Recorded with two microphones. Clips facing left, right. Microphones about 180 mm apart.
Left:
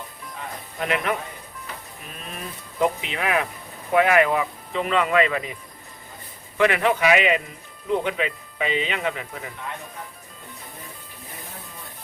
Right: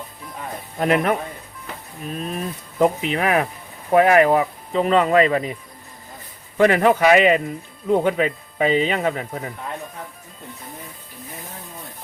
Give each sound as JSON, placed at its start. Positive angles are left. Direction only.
{"t": 0.8, "sound": "speech", "side_deg": -40}
{"t": 6.6, "sound": "speech", "side_deg": -40}